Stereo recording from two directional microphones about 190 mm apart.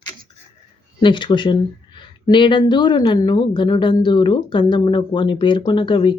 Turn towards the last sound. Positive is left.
turn(degrees=25)  # may be behind; listen again after turning